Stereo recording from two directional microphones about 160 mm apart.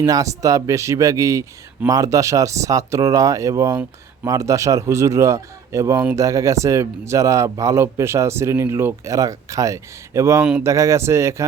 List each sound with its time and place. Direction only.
0.0 s speech: 20° right (ahead or behind)